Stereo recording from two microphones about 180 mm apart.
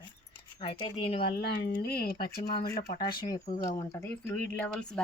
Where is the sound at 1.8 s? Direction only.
60° left (ahead or behind).